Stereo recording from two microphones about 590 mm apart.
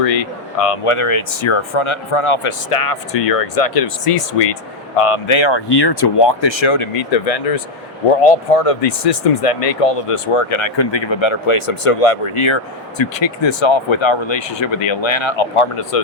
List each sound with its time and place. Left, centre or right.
0.0 s speech: left